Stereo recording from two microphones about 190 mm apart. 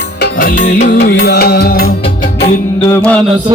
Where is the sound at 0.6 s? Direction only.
65° left (ahead or behind).